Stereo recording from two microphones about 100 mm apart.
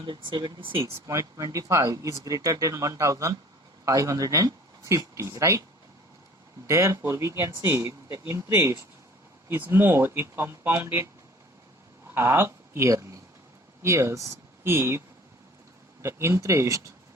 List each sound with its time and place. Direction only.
0.0 s speech: 50° right (ahead or behind)
1.0 s speech: 30° right (ahead or behind)
6.7 s speech: 30° right (ahead or behind)
12.1 s speech: 25° right (ahead or behind)